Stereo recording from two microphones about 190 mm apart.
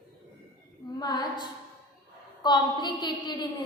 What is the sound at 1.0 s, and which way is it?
A woman's voice, 20° left (ahead or behind).